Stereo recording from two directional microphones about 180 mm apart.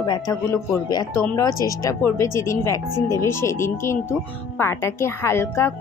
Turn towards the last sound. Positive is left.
turn(degrees=15)  # may be behind; listen again after turning